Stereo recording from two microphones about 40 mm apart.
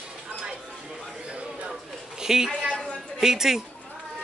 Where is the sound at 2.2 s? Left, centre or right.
Centre.